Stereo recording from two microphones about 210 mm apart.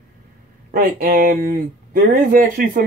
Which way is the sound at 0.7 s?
45° right (ahead or behind).